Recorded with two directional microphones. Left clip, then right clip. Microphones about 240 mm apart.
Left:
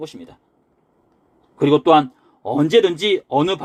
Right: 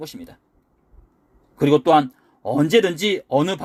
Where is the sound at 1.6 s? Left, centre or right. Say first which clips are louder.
Left 2 dB; right.